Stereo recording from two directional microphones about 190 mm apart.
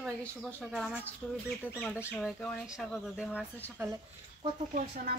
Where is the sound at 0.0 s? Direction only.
5° left (ahead or behind).